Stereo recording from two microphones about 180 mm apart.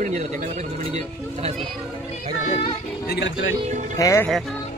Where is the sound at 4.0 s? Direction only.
15° left (ahead or behind).